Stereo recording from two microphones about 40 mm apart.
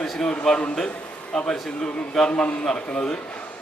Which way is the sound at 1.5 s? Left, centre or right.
Centre.